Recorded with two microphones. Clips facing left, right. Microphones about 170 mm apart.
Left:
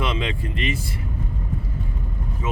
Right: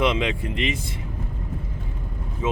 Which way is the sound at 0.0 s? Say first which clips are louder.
Right 4 dB; 15° right (ahead or behind).